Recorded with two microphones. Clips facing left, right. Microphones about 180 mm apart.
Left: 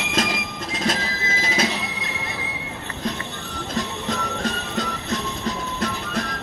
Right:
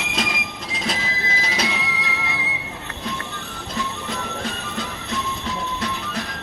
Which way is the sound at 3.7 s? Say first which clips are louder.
Left 2 dB; 40° left (ahead or behind).